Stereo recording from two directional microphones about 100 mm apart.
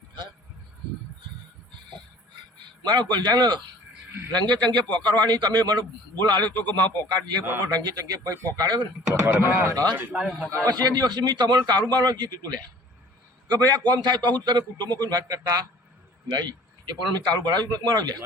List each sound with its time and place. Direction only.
2.8 s a man's voice: 45° right (ahead or behind)
6.5 s speech: 15° left (ahead or behind)
6.8 s a man's voice: 45° right (ahead or behind)
9.3 s speech: 20° right (ahead or behind)
10.1 s a man's voice: 10° right (ahead or behind)
10.6 s a man's voice: 40° right (ahead or behind)
13.5 s a man's voice: 40° right (ahead or behind)